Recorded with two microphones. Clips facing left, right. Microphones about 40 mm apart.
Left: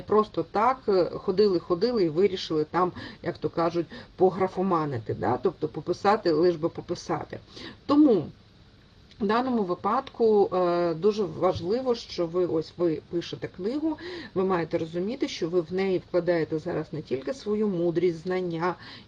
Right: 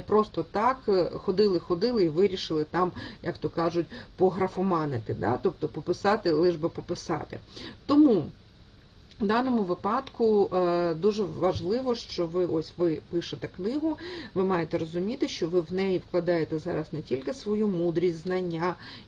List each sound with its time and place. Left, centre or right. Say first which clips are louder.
0.1 s speech: left 1 dB; centre